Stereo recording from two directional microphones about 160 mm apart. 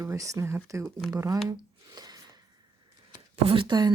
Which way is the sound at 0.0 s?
20° right (ahead or behind).